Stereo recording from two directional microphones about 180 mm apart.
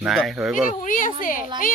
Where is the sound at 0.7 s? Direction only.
45° left (ahead or behind).